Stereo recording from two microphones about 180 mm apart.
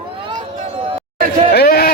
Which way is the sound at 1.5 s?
60° left (ahead or behind).